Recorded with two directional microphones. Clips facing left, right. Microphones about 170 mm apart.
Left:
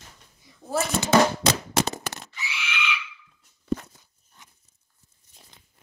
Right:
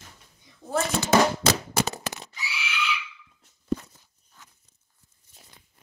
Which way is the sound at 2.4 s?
40° right (ahead or behind).